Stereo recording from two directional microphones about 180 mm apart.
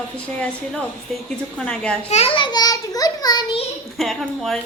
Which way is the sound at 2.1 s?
30° left (ahead or behind).